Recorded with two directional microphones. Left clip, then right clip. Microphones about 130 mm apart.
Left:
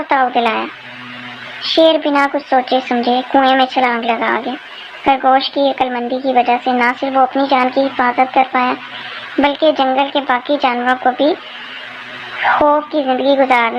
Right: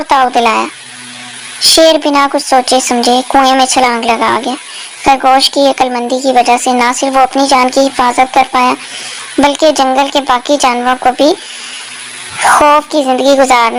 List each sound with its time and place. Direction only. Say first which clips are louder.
0.1 s speech: right 5 dB; 45° right (ahead or behind)
12.4 s speech: right 6 dB; 45° right (ahead or behind)